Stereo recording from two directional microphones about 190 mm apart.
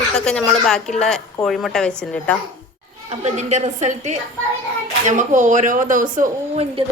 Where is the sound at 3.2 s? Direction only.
35° right (ahead or behind).